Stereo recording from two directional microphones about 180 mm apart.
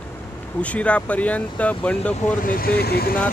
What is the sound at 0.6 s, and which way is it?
Speech, 5° left (ahead or behind).